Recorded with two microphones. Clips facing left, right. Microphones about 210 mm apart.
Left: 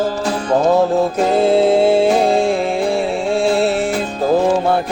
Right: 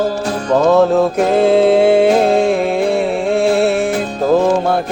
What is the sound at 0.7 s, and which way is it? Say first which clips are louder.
Music: right 3 dB; 65° right (ahead or behind).